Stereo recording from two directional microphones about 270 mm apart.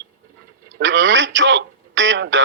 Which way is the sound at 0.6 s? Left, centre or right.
Right.